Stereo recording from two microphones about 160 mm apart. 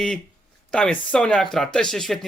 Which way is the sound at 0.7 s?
5° left (ahead or behind).